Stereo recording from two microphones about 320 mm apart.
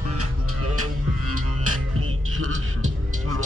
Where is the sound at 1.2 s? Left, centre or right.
Right.